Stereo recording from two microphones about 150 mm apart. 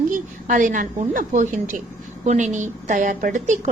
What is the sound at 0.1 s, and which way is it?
A woman's voice, 60° right (ahead or behind).